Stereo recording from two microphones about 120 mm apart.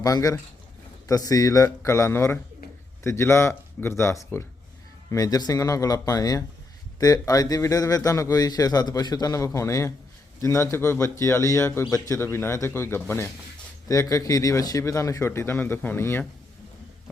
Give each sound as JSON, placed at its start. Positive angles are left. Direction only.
{"t": 0.0, "sound": "a man's voice", "side_deg": 30}